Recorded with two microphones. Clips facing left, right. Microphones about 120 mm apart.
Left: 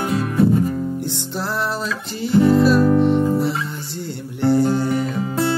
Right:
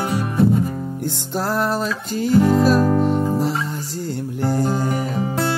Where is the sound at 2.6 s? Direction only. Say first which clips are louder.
Left 2 dB; 40° right (ahead or behind).